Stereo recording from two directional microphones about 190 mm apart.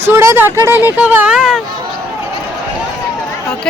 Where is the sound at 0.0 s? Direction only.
15° right (ahead or behind).